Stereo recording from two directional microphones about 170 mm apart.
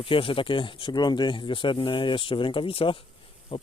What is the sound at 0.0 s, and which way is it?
Speech, 30° left (ahead or behind).